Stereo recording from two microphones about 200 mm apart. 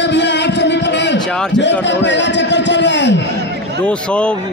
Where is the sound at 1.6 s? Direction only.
60° left (ahead or behind).